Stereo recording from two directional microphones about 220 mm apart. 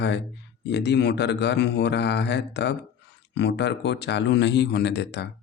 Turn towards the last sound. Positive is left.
turn(degrees=50)  # may be behind; listen again after turning